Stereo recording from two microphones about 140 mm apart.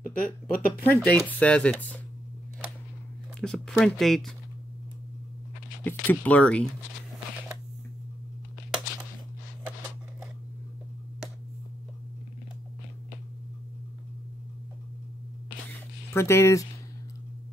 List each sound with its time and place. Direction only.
0.1 s speech: 85° left
1.0 s speech: 10° left (ahead or behind)
3.3 s speech: 5° left (ahead or behind)
5.9 s speech: 10° left (ahead or behind)
16.1 s speech: 20° left (ahead or behind)